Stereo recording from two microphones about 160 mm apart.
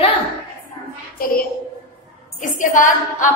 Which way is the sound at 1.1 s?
65° left (ahead or behind).